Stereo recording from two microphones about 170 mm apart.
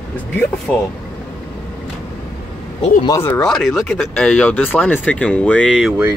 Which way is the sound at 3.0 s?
15° left (ahead or behind).